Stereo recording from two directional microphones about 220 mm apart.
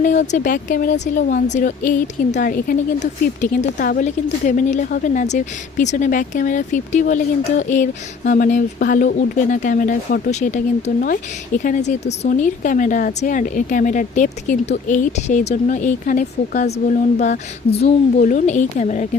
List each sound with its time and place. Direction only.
0.0 s speech: 35° left (ahead or behind)